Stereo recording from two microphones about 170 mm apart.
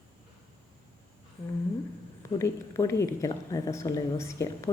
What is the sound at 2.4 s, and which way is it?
A woman's voice, 20° left (ahead or behind).